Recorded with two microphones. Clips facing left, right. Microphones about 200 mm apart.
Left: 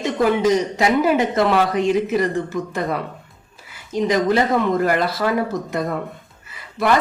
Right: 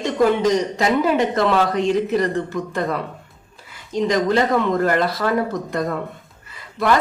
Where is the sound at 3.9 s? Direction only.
5° left (ahead or behind).